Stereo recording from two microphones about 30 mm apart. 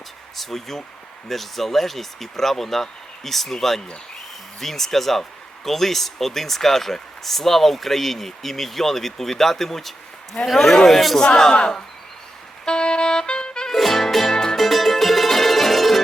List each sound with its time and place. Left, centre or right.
0.3 s speech: centre
12.6 s music: left
13.7 s music: centre
14.5 s mandolin: centre